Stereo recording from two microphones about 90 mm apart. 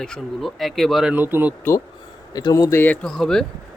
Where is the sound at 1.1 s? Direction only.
20° right (ahead or behind).